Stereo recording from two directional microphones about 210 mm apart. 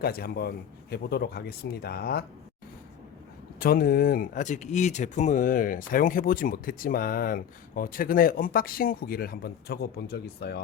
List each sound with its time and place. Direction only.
0.0 s speech: 50° left (ahead or behind)
3.6 s speech: 45° left (ahead or behind)